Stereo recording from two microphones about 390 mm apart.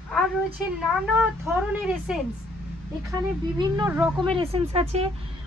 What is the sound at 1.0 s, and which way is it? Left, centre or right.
Speech, centre.